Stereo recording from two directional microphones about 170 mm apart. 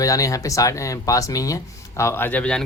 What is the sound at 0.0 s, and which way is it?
Speech, 20° left (ahead or behind).